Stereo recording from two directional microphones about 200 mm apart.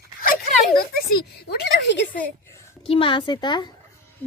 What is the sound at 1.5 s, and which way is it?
Speech, 55° left (ahead or behind).